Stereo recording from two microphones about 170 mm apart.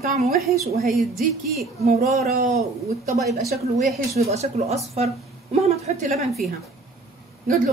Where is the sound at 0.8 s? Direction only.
Centre (ahead or behind).